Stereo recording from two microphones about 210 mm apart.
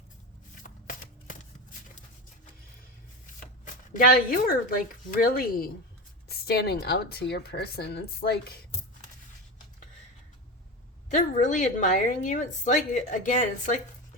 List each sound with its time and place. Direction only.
0.6 s shuffling cards: 40° left (ahead or behind)
3.9 s a woman's voice: 40° left (ahead or behind)
11.1 s a woman's voice: 35° left (ahead or behind)